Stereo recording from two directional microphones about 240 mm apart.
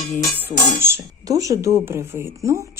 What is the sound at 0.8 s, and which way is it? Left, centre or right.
Speech, centre.